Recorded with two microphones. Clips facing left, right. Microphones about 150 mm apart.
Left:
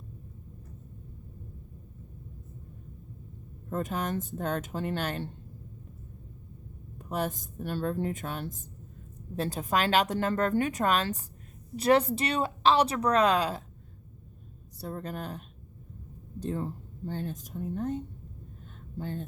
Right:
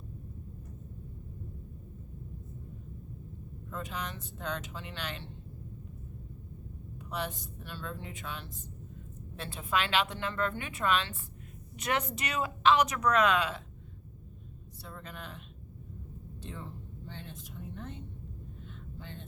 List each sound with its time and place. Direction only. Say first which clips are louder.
3.7 s speech: left 8 dB; 45° left (ahead or behind)
7.0 s speech: left 5 dB; 45° left (ahead or behind)
14.8 s speech: left 9 dB; 40° left (ahead or behind)